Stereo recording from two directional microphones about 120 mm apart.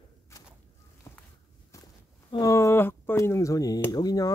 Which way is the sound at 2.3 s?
25° left (ahead or behind).